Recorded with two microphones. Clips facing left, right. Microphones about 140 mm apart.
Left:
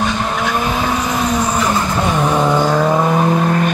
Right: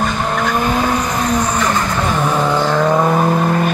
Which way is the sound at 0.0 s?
Centre (ahead or behind).